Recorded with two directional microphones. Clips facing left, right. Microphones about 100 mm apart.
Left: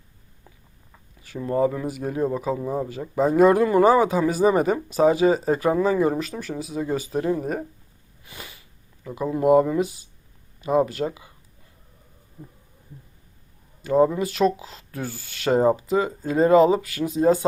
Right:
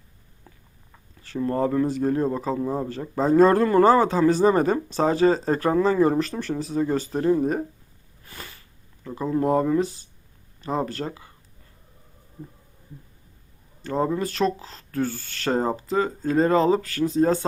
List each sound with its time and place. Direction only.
0.5 s walk: 5° left (ahead or behind)
1.2 s speech: 10° left (ahead or behind)
8.2 s sniff: 10° left (ahead or behind)
9.0 s speech: 5° left (ahead or behind)
13.8 s speech: 5° left (ahead or behind)